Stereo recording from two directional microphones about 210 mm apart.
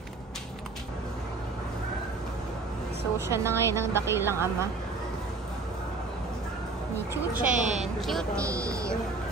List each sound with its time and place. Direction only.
3.2 s speech: 10° right (ahead or behind)
7.3 s speech: 35° right (ahead or behind)
8.0 s speech: centre (ahead or behind)
8.4 s speech: 15° right (ahead or behind)